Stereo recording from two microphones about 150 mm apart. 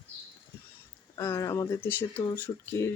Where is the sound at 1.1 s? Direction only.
20° left (ahead or behind).